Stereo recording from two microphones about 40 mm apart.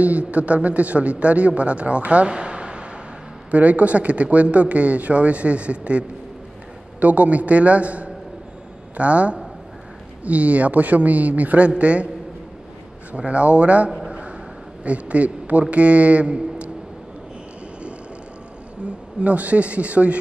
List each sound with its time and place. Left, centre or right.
0.0 s a man's voice: right
2.3 s a sound: right
3.5 s a man's voice: right
13.1 s a man's voice: right
14.0 s a sound: right
14.8 s a man's voice: right
19.1 s a man's voice: right